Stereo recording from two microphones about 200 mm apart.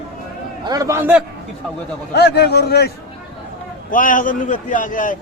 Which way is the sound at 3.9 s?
40° left (ahead or behind).